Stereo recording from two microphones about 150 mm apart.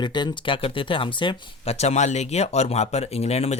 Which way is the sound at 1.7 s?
50° left (ahead or behind).